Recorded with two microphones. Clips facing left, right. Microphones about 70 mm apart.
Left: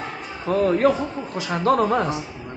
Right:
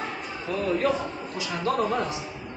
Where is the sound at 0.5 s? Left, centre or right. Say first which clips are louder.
Left 7 dB; left.